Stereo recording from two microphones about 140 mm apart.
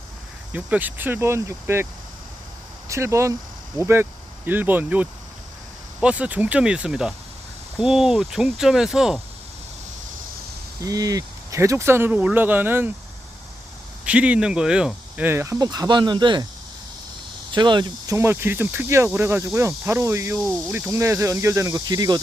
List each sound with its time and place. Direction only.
0.5 s speech: 10° right (ahead or behind)
2.9 s speech: 20° right (ahead or behind); by 9.2 s 5° right (ahead or behind)
10.8 s speech: 25° right (ahead or behind)
14.0 s speech: 10° right (ahead or behind); by 16.5 s 30° right (ahead or behind)
17.5 s speech: 35° right (ahead or behind)